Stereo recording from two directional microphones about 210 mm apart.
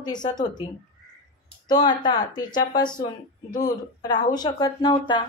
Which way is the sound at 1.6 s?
20° left (ahead or behind).